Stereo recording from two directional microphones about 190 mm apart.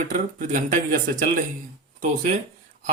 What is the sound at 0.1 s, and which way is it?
Speech, 40° right (ahead or behind).